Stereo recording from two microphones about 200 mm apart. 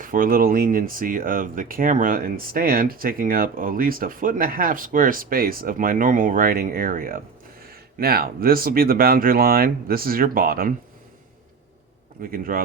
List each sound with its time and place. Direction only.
0.0 s speech: 45° right (ahead or behind)
12.2 s speech: 45° right (ahead or behind)